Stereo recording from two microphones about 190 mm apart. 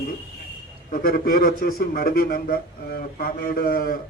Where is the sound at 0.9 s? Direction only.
45° left (ahead or behind).